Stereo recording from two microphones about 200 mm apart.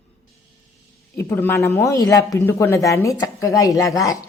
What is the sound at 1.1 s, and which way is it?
Speech, 10° left (ahead or behind).